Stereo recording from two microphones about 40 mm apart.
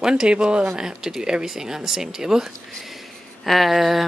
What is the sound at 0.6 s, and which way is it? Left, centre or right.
Speech, centre.